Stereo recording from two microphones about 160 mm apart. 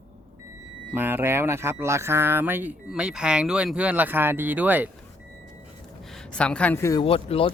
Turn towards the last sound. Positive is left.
turn(degrees=35)  # may be behind; listen again after turning